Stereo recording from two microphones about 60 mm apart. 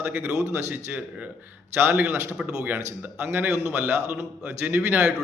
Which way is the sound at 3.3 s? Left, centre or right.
Right.